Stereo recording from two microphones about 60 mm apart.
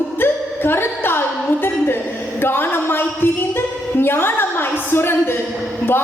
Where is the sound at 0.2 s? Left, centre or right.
Left.